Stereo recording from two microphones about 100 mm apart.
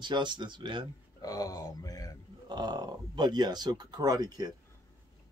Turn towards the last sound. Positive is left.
turn(degrees=-45)  # may be behind; listen again after turning